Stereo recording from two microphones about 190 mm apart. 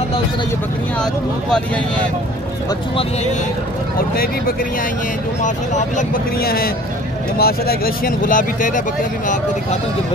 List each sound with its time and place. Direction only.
5.4 s speech: 40° left (ahead or behind)